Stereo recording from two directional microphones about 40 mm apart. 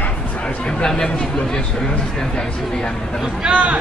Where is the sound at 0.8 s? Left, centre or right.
Centre.